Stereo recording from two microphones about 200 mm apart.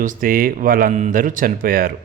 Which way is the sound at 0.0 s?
45° right (ahead or behind).